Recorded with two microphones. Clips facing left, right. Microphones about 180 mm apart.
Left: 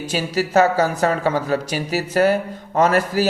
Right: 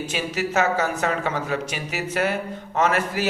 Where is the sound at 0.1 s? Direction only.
35° left (ahead or behind).